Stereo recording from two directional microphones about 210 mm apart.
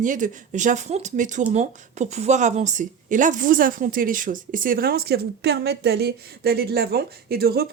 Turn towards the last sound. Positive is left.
turn(degrees=-45)  # may be behind; listen again after turning